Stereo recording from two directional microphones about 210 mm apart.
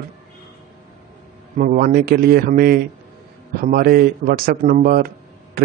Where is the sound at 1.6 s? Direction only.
40° right (ahead or behind).